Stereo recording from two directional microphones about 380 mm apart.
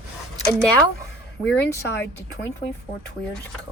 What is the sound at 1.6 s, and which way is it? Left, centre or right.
Speech, centre.